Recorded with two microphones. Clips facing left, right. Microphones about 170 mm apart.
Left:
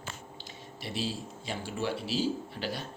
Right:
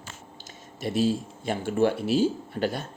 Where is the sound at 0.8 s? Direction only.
50° right (ahead or behind).